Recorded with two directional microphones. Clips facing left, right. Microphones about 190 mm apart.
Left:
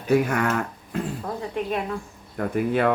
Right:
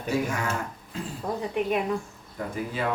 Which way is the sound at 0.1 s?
60° left (ahead or behind).